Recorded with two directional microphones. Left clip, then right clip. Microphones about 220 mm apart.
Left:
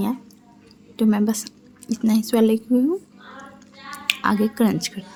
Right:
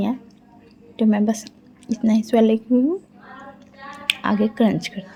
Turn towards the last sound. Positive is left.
turn(degrees=20)  # may be behind; listen again after turning